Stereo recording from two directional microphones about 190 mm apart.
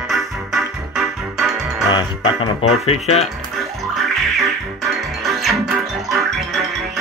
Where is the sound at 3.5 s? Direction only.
Centre (ahead or behind).